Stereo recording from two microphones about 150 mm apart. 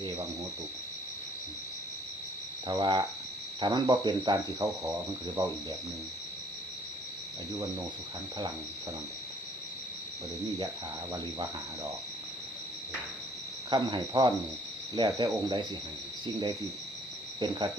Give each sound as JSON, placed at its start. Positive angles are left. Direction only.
{"t": 2.6, "sound": "speech", "side_deg": -30}
{"t": 13.7, "sound": "speech", "side_deg": -30}
{"t": 17.4, "sound": "speech", "side_deg": -30}